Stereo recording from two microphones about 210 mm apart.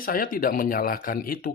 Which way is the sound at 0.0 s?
40° left (ahead or behind).